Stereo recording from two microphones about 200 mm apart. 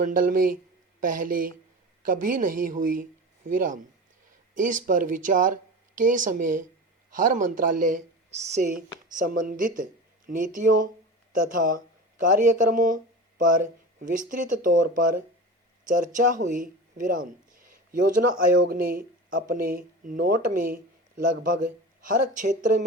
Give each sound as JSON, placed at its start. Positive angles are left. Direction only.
{"t": 0.0, "sound": "a man's voice", "side_deg": -40}
{"t": 14.0, "sound": "speech", "side_deg": -40}
{"t": 18.7, "sound": "speech", "side_deg": -50}